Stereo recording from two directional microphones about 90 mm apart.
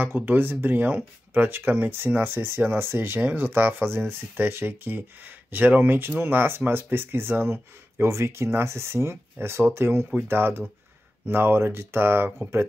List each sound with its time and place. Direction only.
0.0 s speech: 25° right (ahead or behind)